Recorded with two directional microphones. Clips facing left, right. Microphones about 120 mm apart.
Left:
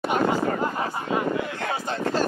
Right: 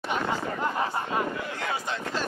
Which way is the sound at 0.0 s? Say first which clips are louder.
Left 6 dB; 45° left (ahead or behind).